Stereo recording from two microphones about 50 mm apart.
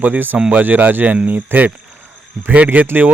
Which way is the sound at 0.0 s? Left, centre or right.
Right.